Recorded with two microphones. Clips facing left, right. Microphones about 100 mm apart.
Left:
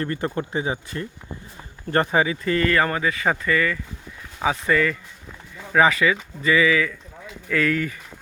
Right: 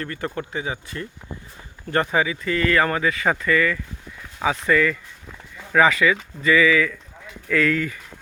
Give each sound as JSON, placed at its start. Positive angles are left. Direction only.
{"t": 0.0, "sound": "speech", "side_deg": 30}